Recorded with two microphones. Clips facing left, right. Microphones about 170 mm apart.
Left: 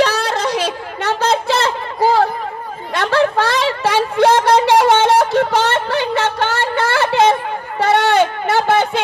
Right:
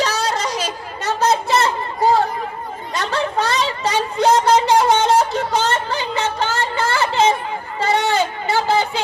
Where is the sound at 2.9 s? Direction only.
65° left (ahead or behind).